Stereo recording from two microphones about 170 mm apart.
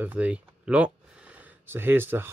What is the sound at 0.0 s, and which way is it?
Speech, 10° right (ahead or behind).